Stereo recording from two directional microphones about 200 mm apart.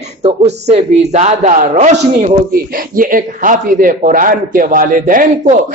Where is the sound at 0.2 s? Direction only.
30° right (ahead or behind).